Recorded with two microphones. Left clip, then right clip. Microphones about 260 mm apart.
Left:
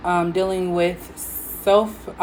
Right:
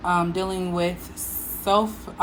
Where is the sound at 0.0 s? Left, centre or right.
Right.